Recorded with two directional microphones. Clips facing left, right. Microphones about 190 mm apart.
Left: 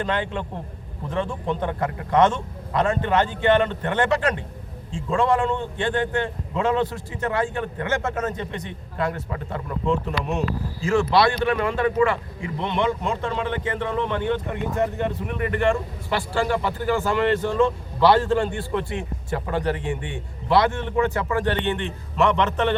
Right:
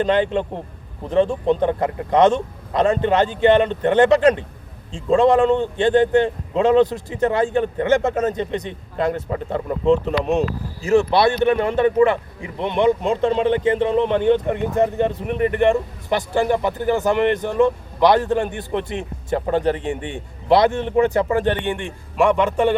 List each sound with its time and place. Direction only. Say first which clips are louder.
0.0 s a man's voice: right 8 dB; 20° right (ahead or behind)
11.3 s speech: right 5 dB; 20° right (ahead or behind)
13.1 s a man's voice: right 8 dB; 30° right (ahead or behind); by 22.7 s 10° right (ahead or behind)